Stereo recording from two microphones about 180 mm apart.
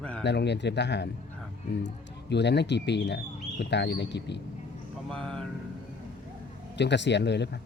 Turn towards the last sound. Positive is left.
turn(degrees=70)  # may be behind; listen again after turning